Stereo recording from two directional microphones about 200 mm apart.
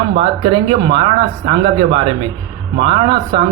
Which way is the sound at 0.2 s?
25° right (ahead or behind).